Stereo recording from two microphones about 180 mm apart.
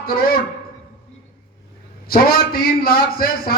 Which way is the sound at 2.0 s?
55° left (ahead or behind).